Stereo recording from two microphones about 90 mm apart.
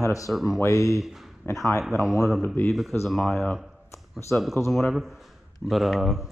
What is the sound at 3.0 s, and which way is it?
Speech, 5° left (ahead or behind).